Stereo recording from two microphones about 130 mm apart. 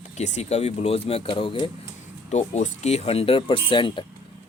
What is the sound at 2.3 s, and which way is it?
Speech, 65° left (ahead or behind).